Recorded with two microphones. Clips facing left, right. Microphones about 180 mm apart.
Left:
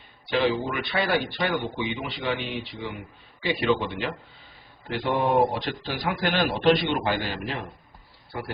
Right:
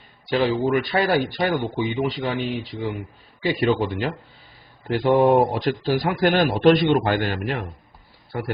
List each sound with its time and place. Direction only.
0.3 s speech: 40° right (ahead or behind); by 8.5 s 60° right (ahead or behind)